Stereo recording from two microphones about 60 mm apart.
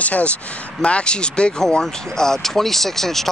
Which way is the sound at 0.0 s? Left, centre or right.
Left.